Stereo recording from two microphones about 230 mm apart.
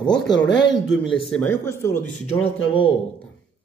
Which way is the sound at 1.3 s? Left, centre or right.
Centre.